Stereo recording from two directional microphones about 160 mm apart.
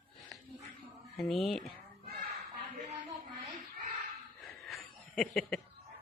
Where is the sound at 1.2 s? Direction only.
Centre (ahead or behind).